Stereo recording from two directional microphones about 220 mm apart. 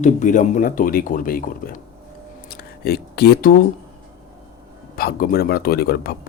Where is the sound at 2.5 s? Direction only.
45° left (ahead or behind).